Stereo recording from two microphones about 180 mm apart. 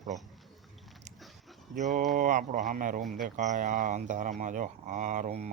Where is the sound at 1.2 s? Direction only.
Centre (ahead or behind).